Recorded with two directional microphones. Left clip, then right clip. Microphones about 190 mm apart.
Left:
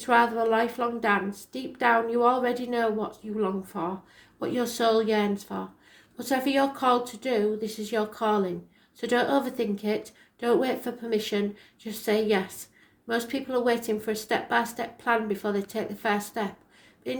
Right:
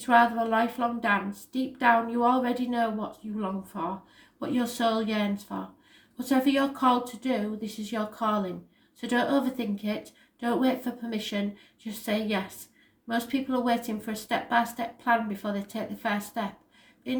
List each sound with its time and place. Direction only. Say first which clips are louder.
0.0 s a woman's voice: even; 35° left (ahead or behind)